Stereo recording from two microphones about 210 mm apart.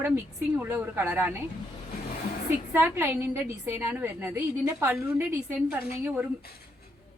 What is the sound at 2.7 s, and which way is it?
A woman's voice, 10° right (ahead or behind).